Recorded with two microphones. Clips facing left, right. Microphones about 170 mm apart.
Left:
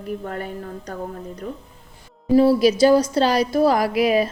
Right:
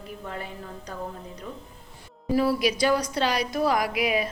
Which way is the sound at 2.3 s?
30° left (ahead or behind).